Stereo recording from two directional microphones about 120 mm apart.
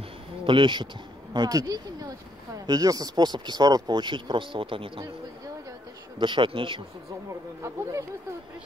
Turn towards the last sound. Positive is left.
turn(degrees=-25)  # may be behind; listen again after turning